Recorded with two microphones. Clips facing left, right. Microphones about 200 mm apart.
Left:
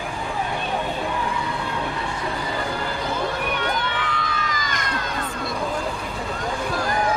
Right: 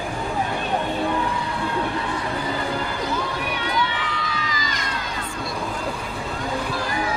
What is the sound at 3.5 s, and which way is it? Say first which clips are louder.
Crowd: even; 50° left (ahead or behind).